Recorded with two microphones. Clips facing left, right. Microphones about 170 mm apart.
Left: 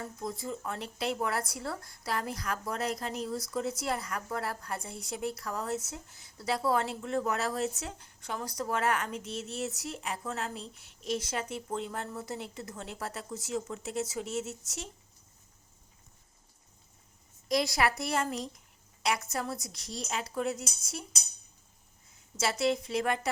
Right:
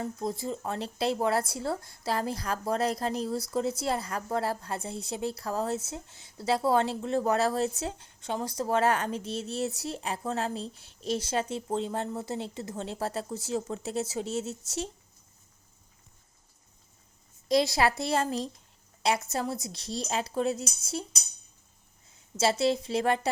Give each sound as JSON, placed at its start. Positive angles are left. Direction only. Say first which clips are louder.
{"t": 0.0, "sound": "speech", "louder": "right 5 dB", "side_deg": -30}
{"t": 17.5, "sound": "speech", "louder": "right 4 dB", "side_deg": -25}
{"t": 22.4, "sound": "speech", "louder": "right 4 dB", "side_deg": -30}